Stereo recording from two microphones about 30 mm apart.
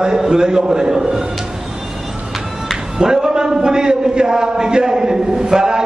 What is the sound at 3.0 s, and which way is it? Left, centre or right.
A man's voice, right.